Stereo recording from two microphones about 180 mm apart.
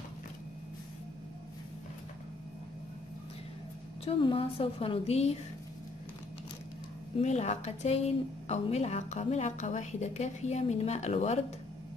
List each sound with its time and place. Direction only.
4.0 s a woman's voice: 30° left (ahead or behind)
7.2 s a woman's voice: 40° left (ahead or behind)